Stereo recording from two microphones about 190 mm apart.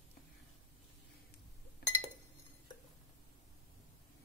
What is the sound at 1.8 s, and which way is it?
Glass, 55° left (ahead or behind).